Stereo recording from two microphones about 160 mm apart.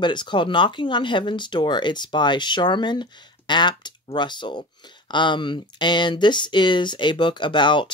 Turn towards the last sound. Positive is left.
turn(degrees=30)  # may be behind; listen again after turning